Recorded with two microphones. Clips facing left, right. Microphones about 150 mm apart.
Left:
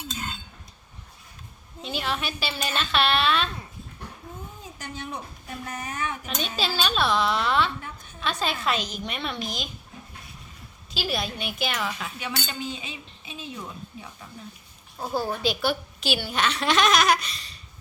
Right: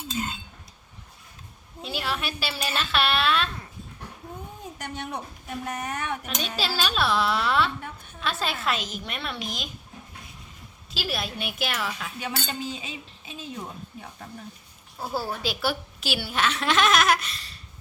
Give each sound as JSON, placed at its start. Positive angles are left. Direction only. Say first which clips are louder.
{"t": 1.8, "sound": "a woman's voice", "louder": "left 1 dB", "side_deg": -5}
{"t": 4.8, "sound": "speech", "louder": "right 1 dB", "side_deg": -70}
{"t": 6.2, "sound": "a woman's voice", "louder": "left 1 dB", "side_deg": 0}
{"t": 10.9, "sound": "a woman's voice", "louder": "left 2 dB", "side_deg": 0}
{"t": 12.2, "sound": "speech", "louder": "right 1 dB", "side_deg": -40}
{"t": 14.9, "sound": "a woman's voice", "louder": "left 2 dB", "side_deg": -5}